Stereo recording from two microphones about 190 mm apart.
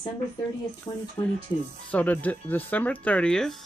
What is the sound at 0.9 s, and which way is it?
Speech, 20° left (ahead or behind).